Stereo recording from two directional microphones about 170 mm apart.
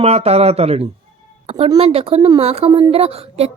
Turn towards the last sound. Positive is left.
turn(degrees=-35)  # may be behind; listen again after turning